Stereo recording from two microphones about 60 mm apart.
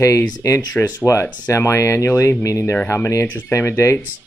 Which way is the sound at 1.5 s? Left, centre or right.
Left.